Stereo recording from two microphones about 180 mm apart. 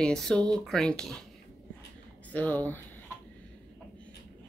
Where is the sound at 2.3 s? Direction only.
10° left (ahead or behind).